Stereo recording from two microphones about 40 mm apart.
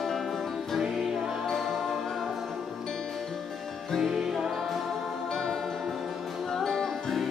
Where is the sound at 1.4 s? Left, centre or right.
Centre.